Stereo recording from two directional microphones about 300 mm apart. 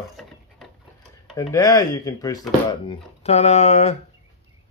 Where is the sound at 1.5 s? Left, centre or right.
Centre.